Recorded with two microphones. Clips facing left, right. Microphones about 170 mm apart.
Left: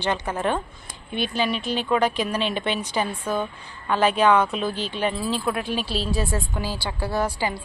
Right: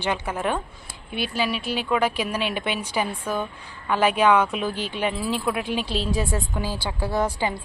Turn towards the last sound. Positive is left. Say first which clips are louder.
# right 1 dB
turn(degrees=-20)  # may be behind; listen again after turning